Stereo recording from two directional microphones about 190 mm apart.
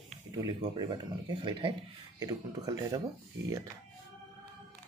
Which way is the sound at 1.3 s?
25° right (ahead or behind).